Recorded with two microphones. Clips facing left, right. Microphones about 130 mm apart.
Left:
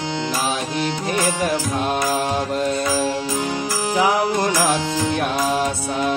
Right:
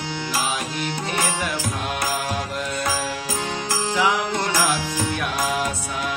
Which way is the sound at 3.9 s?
35° left (ahead or behind).